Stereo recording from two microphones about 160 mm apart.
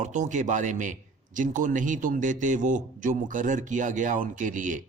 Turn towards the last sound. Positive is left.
turn(degrees=-50)  # may be behind; listen again after turning